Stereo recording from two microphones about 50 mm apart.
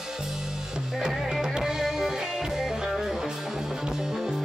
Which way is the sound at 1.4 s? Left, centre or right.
Centre.